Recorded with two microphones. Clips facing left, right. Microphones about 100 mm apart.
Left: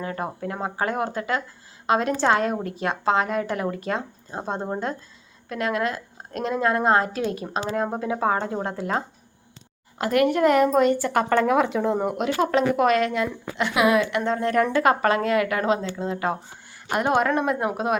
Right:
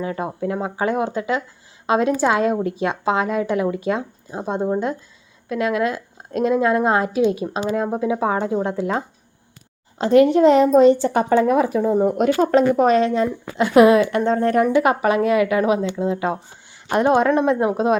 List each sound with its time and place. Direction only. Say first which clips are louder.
0.4 s a woman's voice: right 6 dB; 20° right (ahead or behind)
10.2 s a woman's voice: right 5 dB; 60° left (ahead or behind)
10.6 s a woman's voice: right 6 dB; 25° right (ahead or behind)
11.3 s speech: right 4 dB; 80° left
12.0 s speech: right 6 dB; 45° right (ahead or behind)
14.6 s a woman's voice: right 3 dB; 15° right (ahead or behind)